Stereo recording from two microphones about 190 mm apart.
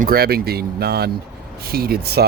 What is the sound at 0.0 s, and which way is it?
Speech, 50° right (ahead or behind).